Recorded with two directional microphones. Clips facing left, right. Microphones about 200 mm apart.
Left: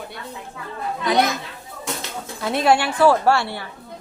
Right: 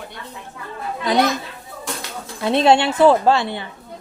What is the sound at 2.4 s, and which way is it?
A woman's voice, 25° right (ahead or behind).